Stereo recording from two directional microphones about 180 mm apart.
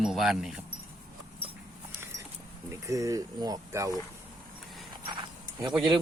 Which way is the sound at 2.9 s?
20° right (ahead or behind).